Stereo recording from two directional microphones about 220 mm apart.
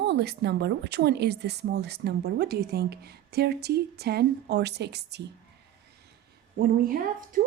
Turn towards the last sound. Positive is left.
turn(degrees=-40)  # may be behind; listen again after turning